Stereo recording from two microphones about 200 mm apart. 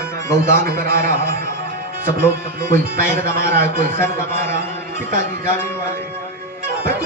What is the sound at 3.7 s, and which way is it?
Speech, 10° left (ahead or behind).